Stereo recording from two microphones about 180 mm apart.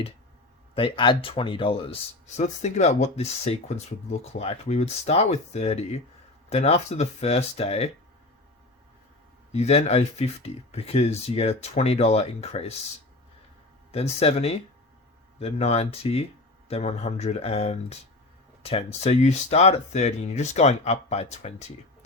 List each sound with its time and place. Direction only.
0.7 s speech: 30° left (ahead or behind)
9.5 s speech: 35° left (ahead or behind)
13.9 s speech: 35° left (ahead or behind)